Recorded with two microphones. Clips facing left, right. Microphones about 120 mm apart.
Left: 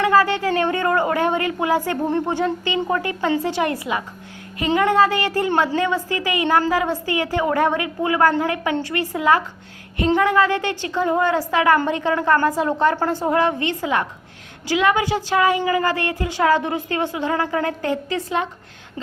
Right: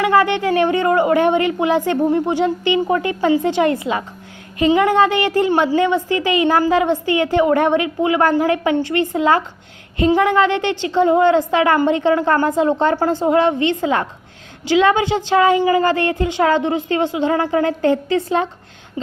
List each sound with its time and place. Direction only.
0.0 s a woman's voice: 20° right (ahead or behind)